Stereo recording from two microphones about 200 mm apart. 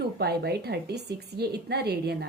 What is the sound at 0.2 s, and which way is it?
A woman's voice, 55° right (ahead or behind).